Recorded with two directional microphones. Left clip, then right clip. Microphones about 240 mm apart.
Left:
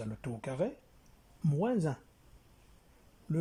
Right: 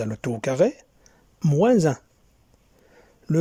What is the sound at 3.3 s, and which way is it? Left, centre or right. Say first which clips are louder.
Speech: right 14 dB; right.